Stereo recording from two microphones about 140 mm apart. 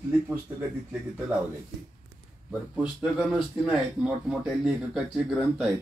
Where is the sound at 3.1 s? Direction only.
5° right (ahead or behind).